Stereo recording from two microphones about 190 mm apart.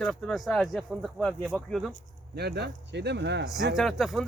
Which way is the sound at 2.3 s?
60° right (ahead or behind).